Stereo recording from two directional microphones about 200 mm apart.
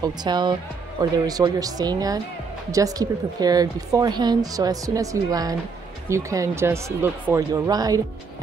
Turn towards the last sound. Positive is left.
turn(degrees=-20)  # may be behind; listen again after turning